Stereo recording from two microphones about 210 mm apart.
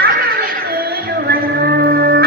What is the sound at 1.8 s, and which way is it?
Music, 50° right (ahead or behind).